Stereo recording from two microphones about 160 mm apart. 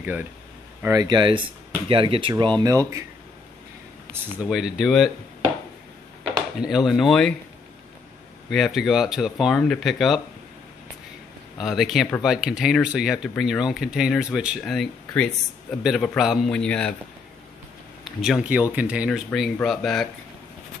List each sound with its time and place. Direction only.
0.0 s speech: 10° right (ahead or behind)
0.8 s speech: 25° right (ahead or behind)
2.6 s speech: 20° right (ahead or behind)
4.5 s speech: 5° right (ahead or behind)
6.6 s speech: centre (ahead or behind)
8.5 s speech: centre (ahead or behind)
11.6 s speech: centre (ahead or behind)
18.0 s speech: centre (ahead or behind)